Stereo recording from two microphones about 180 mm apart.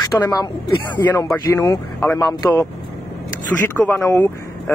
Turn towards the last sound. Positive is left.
turn(degrees=10)  # may be behind; listen again after turning